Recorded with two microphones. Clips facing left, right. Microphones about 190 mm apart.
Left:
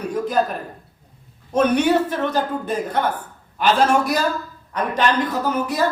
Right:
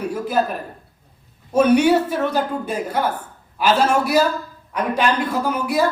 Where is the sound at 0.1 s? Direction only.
5° right (ahead or behind).